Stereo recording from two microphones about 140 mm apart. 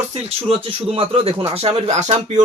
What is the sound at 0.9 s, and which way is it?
Speech, 40° right (ahead or behind).